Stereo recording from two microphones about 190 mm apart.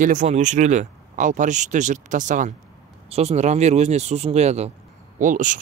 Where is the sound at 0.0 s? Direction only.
40° right (ahead or behind).